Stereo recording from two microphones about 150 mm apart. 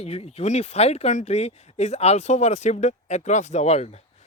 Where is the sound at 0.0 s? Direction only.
45° left (ahead or behind).